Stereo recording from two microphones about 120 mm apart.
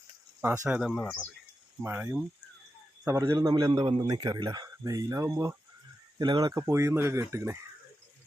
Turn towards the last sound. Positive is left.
turn(degrees=-20)  # may be behind; listen again after turning